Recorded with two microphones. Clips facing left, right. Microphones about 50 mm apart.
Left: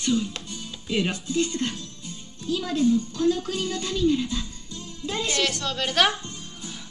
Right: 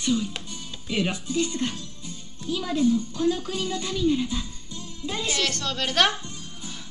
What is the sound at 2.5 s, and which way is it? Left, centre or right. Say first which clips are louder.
A woman's voice: even; centre.